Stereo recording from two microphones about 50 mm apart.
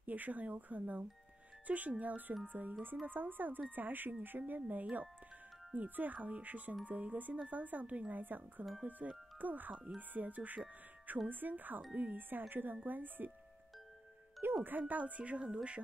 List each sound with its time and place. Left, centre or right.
0.0 s speech: right
14.4 s speech: right